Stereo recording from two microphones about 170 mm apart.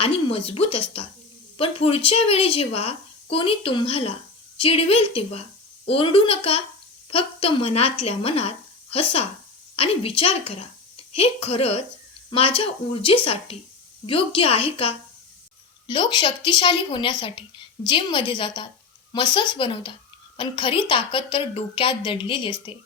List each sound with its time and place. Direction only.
0.0 s a woman's voice: 35° left (ahead or behind)